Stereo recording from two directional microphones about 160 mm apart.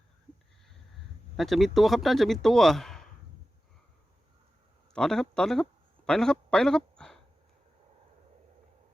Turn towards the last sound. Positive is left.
turn(degrees=5)  # may be behind; listen again after turning